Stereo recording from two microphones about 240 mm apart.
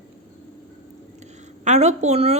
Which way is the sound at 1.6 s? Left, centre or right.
Right.